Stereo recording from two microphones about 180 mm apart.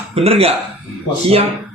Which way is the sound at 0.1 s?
35° right (ahead or behind).